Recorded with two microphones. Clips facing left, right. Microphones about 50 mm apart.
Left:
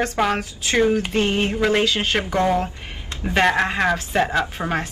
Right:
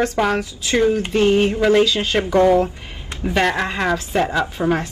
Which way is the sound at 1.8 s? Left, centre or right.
Left.